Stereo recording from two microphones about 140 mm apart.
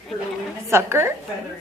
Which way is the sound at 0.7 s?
20° right (ahead or behind).